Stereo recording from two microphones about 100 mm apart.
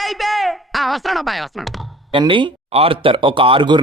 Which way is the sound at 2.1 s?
55° right (ahead or behind).